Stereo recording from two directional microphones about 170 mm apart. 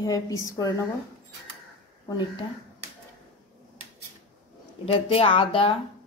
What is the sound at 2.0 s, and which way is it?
Speech, 25° left (ahead or behind).